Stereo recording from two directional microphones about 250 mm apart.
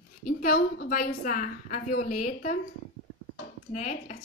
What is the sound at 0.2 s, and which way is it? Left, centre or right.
A woman's voice, left.